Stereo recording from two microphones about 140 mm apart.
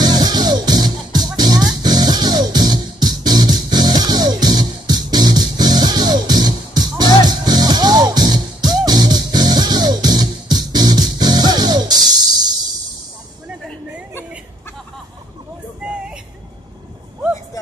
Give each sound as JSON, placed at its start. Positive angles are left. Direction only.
{"t": 0.0, "sound": "music", "side_deg": -30}